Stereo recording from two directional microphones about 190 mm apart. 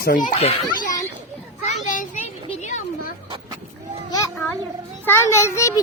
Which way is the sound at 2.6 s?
40° left (ahead or behind).